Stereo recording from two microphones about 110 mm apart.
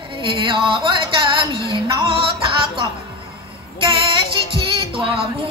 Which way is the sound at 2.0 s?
55° right (ahead or behind).